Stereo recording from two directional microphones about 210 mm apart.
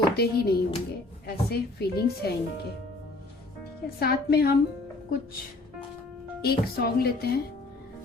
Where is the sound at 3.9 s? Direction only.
50° left (ahead or behind).